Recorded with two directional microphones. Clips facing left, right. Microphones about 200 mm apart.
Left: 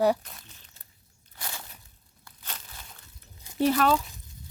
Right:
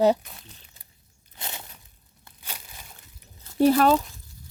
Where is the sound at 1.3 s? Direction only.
20° right (ahead or behind).